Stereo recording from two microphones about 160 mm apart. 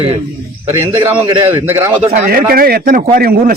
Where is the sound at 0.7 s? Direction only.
15° right (ahead or behind).